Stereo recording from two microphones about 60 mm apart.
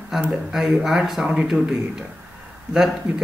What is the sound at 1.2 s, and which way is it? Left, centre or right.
Speech, centre.